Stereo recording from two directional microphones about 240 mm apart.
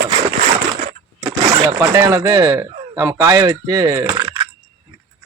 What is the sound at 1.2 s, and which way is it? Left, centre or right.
Speech, centre.